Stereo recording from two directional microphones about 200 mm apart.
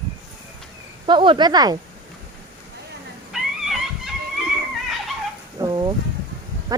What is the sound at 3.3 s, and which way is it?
Dog, centre (ahead or behind).